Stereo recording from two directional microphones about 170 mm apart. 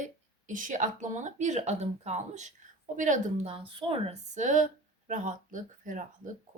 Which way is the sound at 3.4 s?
30° right (ahead or behind).